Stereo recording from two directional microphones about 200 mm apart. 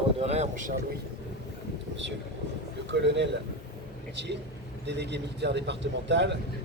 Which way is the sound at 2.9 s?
60° right (ahead or behind).